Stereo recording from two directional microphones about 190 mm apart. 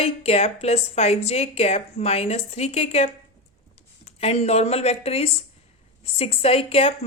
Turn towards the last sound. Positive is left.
turn(degrees=30)  # may be behind; listen again after turning